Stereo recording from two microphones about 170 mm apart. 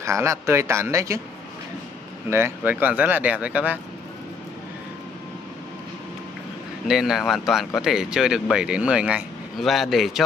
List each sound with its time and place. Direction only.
0.0 s speech: 15° right (ahead or behind)
2.2 s speech: 15° right (ahead or behind)
6.9 s speech: centre (ahead or behind)